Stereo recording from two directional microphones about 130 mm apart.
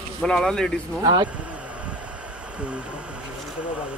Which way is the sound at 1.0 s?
35° right (ahead or behind).